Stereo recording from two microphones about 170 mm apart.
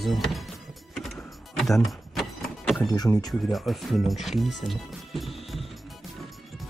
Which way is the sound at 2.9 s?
20° left (ahead or behind).